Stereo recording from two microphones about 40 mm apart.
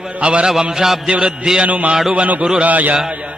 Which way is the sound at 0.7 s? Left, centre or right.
Centre.